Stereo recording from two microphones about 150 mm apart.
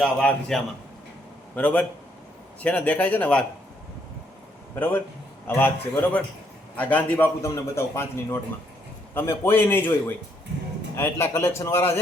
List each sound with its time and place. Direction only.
0.0 s a man's voice: 5° left (ahead or behind)
4.7 s a man's voice: 15° left (ahead or behind)
10.9 s a man's voice: 20° left (ahead or behind)